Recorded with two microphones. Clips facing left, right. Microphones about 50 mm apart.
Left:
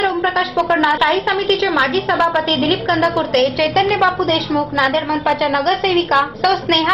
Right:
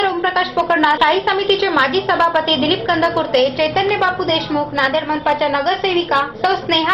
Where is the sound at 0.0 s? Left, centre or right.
Centre.